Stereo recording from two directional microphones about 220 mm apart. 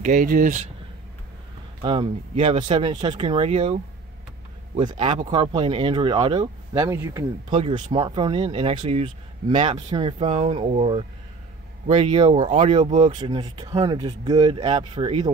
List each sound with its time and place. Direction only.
0.0 s speech: 35° right (ahead or behind)
1.8 s speech: 25° right (ahead or behind)
13.1 s speech: 20° right (ahead or behind)